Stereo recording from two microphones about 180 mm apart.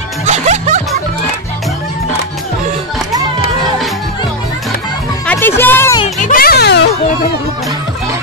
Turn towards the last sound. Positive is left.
turn(degrees=65)  # may be behind; listen again after turning